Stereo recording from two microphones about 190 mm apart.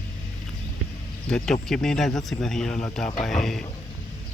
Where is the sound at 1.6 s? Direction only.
5° left (ahead or behind).